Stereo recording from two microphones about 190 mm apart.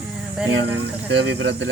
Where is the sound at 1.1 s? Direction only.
70° right (ahead or behind).